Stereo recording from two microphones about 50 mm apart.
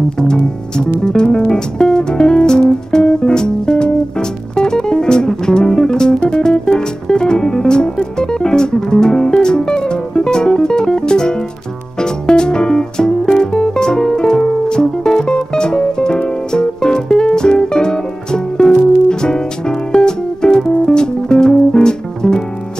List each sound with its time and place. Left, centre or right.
0.2 s music: centre